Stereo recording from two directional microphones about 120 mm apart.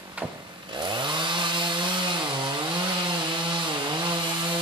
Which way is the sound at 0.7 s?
40° right (ahead or behind).